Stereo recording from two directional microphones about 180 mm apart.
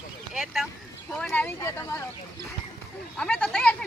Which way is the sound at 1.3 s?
10° left (ahead or behind).